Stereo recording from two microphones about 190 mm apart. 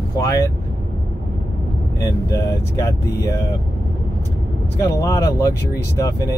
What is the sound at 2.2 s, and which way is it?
Speech, 15° left (ahead or behind).